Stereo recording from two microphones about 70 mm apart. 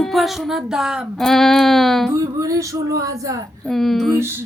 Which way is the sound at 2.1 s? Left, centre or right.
Right.